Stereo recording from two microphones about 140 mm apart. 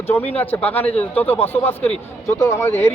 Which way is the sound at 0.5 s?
15° left (ahead or behind).